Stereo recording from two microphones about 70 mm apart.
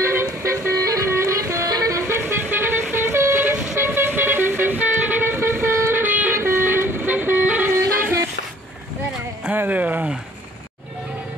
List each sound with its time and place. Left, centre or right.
0.0 s vehicle: right
0.7 s music: right
1.7 s music: right
2.0 s vehicle: right
3.7 s train: right
6.3 s vehicle: right
9.5 s a sound: right